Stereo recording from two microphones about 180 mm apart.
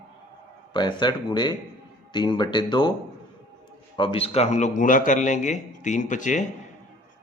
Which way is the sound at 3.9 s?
30° left (ahead or behind).